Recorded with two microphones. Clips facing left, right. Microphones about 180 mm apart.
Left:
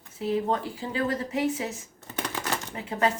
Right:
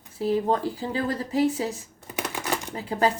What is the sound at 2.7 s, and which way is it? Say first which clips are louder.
Speech: right 2 dB; 35° right (ahead or behind).